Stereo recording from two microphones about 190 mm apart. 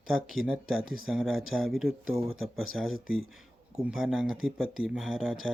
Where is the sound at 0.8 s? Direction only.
90° right.